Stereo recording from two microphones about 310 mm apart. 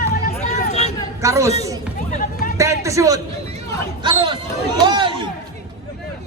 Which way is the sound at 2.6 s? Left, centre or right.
Centre.